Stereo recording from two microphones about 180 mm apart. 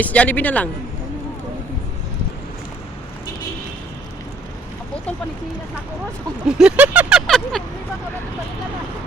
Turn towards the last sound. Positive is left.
turn(degrees=0)  # may be behind; listen again after turning